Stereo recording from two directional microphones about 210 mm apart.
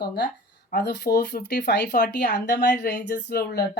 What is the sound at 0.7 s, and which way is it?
Speech, 50° left (ahead or behind).